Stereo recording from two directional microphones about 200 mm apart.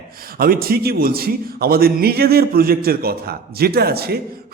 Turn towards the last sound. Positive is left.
turn(degrees=-50)  # may be behind; listen again after turning